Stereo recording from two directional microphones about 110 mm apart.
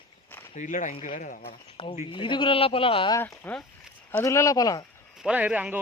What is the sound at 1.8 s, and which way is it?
Speech, 55° left (ahead or behind).